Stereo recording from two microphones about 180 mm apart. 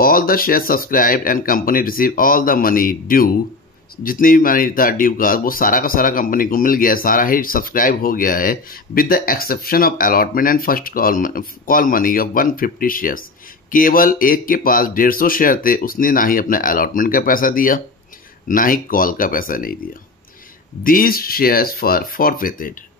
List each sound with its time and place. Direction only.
0.0 s speech: 55° left (ahead or behind)
20.8 s speech: 50° left (ahead or behind)